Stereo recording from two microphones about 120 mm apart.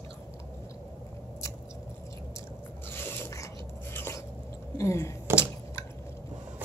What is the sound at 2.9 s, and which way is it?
Zipper, 20° left (ahead or behind).